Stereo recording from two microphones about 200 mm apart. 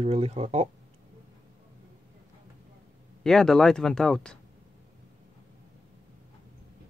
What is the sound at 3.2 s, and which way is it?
Speech, centre (ahead or behind).